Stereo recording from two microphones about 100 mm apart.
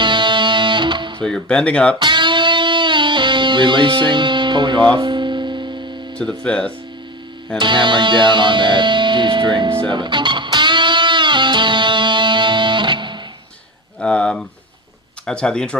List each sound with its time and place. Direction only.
0.0 s music: 50° right (ahead or behind)
1.2 s speech: 10° left (ahead or behind)
2.0 s music: 50° right (ahead or behind)
6.1 s speech: 10° left (ahead or behind)
7.6 s music: 50° right (ahead or behind)
14.0 s speech: 10° left (ahead or behind)